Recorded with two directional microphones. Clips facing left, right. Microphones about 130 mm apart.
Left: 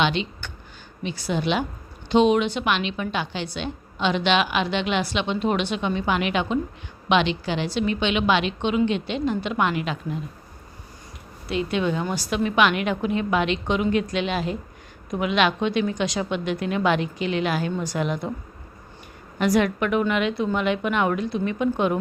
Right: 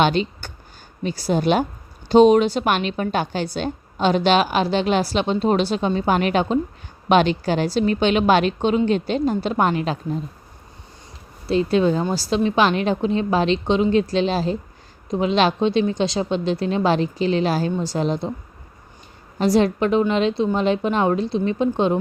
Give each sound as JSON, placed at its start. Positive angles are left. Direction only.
{"t": 0.0, "sound": "a woman's voice", "side_deg": -40}
{"t": 11.4, "sound": "a woman's voice", "side_deg": -35}
{"t": 19.4, "sound": "a woman's voice", "side_deg": -30}